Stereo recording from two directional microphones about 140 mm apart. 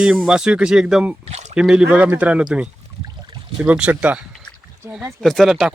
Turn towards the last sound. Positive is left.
turn(degrees=0)  # may be behind; listen again after turning